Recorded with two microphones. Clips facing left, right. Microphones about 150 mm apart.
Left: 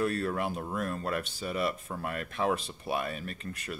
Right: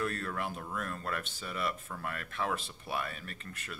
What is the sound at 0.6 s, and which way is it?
Speech, 25° left (ahead or behind).